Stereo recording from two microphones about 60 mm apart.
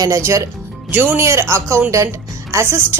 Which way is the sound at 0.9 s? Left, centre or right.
Right.